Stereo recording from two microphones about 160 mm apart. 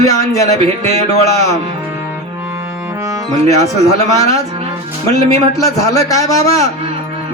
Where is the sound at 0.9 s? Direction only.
20° left (ahead or behind).